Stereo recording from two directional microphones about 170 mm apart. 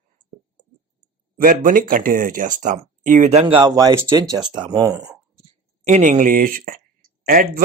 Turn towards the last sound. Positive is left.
turn(degrees=-60)  # may be behind; listen again after turning